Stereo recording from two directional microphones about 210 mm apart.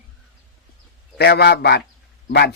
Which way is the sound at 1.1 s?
50° left (ahead or behind).